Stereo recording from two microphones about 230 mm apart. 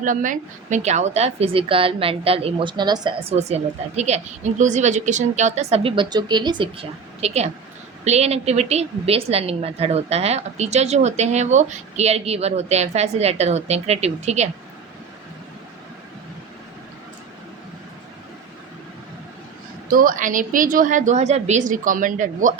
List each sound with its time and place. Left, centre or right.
0.0 s a woman's voice: right
19.9 s a woman's voice: right